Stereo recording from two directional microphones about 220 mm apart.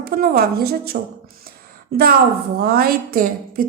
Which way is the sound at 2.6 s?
45° right (ahead or behind).